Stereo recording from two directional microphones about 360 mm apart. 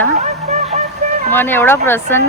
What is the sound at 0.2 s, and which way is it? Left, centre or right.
Music, centre.